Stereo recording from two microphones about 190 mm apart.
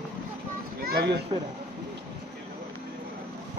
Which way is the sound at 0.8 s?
55° right (ahead or behind).